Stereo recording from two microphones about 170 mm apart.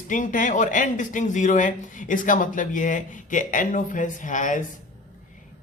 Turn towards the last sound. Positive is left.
turn(degrees=50)  # may be behind; listen again after turning